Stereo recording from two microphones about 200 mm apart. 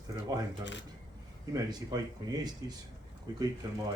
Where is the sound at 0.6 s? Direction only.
65° left (ahead or behind).